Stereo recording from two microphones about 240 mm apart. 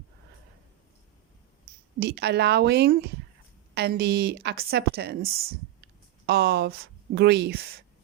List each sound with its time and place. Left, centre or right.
2.0 s a woman's voice: right